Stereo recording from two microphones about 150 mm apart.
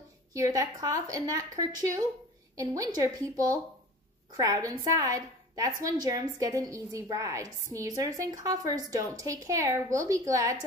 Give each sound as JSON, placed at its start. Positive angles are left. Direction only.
{"t": 0.3, "sound": "a woman's voice", "side_deg": -25}